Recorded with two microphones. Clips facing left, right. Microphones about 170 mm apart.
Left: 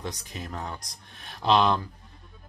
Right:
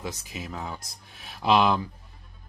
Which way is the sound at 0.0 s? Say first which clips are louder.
Right 1 dB; 5° right (ahead or behind).